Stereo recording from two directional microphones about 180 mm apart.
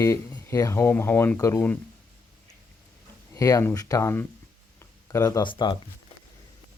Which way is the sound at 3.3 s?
20° left (ahead or behind).